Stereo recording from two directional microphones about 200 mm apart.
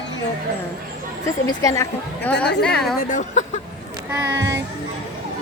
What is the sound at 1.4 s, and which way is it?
A woman's voice, 15° left (ahead or behind).